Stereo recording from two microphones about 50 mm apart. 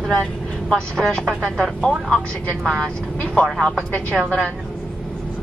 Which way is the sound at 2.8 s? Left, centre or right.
Left.